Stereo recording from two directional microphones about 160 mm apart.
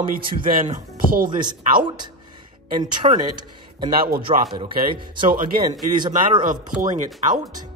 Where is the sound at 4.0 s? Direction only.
70° right (ahead or behind).